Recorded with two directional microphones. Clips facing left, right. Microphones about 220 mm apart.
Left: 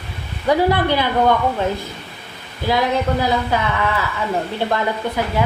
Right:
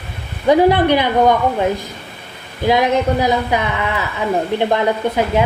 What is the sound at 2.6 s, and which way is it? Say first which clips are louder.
Speech: right 4 dB; 20° right (ahead or behind).